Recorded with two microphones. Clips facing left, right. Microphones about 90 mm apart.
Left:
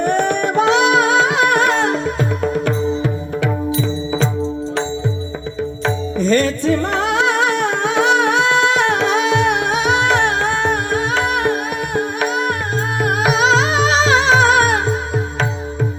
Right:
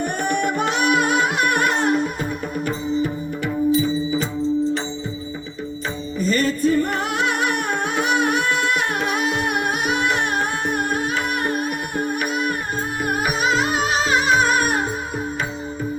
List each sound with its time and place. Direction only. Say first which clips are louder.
0.0 s music: left 5 dB; 90° left
6.3 s music: left 2 dB; 90° left